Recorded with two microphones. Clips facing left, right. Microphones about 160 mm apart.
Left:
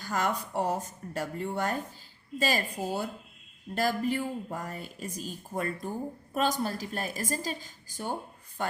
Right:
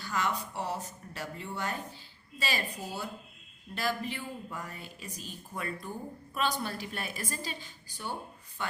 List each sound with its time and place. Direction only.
0.0 s a woman's voice: 50° left (ahead or behind)